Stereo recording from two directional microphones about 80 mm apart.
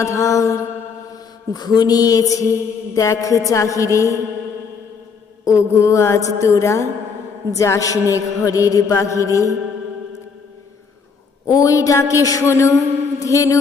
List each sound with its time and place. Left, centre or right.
0.0 s speech: left
1.1 s mantra: left
5.5 s speech: left
11.4 s mantra: left
12.5 s speech: left